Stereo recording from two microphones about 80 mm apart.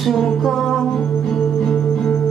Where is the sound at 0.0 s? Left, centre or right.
Centre.